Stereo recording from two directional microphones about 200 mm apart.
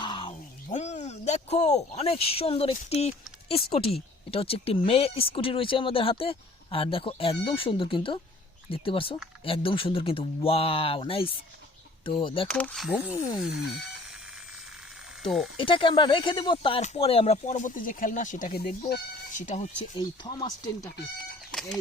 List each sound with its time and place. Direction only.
0.0 s music: 25° left (ahead or behind)
0.7 s speech: 35° left (ahead or behind)
12.5 s speech: 5° left (ahead or behind)
15.2 s speech: centre (ahead or behind)
15.5 s speech: 25° left (ahead or behind); by 19.6 s 40° left (ahead or behind)
20.0 s speech: 20° left (ahead or behind)